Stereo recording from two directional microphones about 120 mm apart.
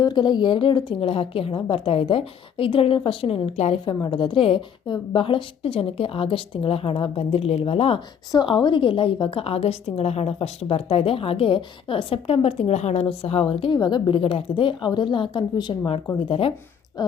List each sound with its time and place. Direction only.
0.0 s a woman's voice: 40° left (ahead or behind); by 3.8 s 60° left (ahead or behind)
3.8 s a woman's voice: 40° left (ahead or behind)
8.3 s a woman's voice: 40° left (ahead or behind)
17.0 s speech: 35° left (ahead or behind)